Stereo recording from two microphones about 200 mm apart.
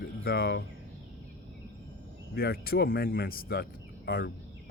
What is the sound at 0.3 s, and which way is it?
Speech, 50° left (ahead or behind).